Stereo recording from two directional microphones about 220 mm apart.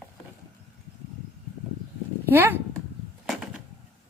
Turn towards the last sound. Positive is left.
turn(degrees=0)  # may be behind; listen again after turning